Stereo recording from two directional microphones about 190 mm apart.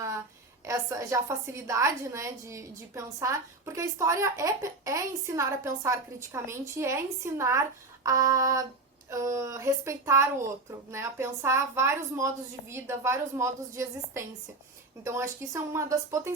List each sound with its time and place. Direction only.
0.6 s a woman's voice: 15° right (ahead or behind)